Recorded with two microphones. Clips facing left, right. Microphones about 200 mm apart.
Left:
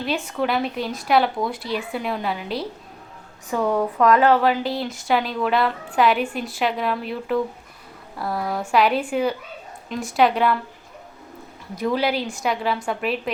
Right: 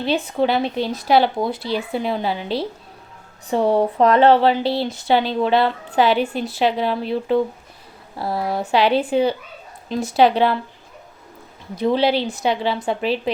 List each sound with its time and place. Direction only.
0.0 s speech: 30° right (ahead or behind)
11.8 s speech: 30° right (ahead or behind)